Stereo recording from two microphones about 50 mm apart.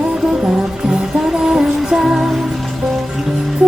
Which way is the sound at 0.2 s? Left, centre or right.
Centre.